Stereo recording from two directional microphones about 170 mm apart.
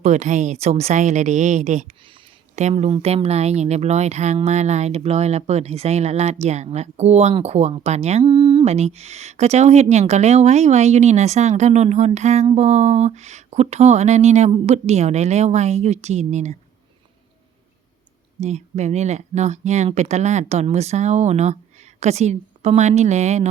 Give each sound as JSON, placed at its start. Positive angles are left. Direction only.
{"t": 0.0, "sound": "speech", "side_deg": -45}
{"t": 8.2, "sound": "speech", "side_deg": -30}
{"t": 18.3, "sound": "speech", "side_deg": -40}